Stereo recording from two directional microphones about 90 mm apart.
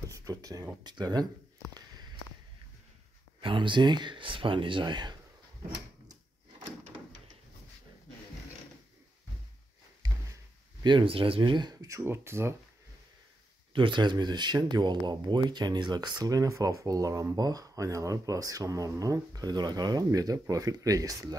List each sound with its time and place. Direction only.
0.1 s speech: 40° right (ahead or behind)
3.3 s speech: 70° right (ahead or behind)
10.0 s a sound: 50° right (ahead or behind)
11.7 s speech: 45° right (ahead or behind)
12.0 s speech: 30° right (ahead or behind)
13.7 s speech: 60° right (ahead or behind); by 21.4 s 40° right (ahead or behind)